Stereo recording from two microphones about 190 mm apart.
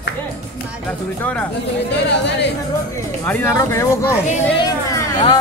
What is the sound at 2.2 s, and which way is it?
Speech, 65° left (ahead or behind).